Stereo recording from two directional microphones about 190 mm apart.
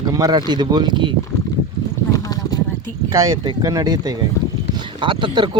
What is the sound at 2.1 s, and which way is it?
Clip-clop, 20° left (ahead or behind).